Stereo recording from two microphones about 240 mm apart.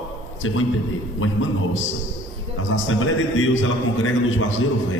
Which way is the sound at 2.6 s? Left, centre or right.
Left.